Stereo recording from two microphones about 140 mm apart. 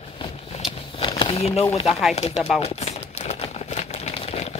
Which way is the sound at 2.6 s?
50° left (ahead or behind).